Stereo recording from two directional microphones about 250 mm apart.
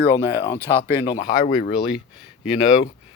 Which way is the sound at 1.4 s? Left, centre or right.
Left.